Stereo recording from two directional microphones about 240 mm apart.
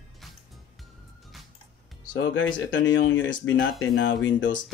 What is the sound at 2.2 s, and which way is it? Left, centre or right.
Speech, left.